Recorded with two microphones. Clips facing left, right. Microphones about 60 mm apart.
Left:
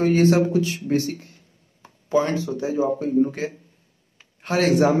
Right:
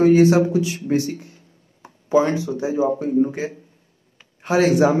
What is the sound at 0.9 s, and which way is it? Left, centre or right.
Speech, left.